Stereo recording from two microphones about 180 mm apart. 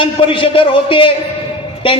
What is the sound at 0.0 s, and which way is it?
A man's voice, 30° left (ahead or behind).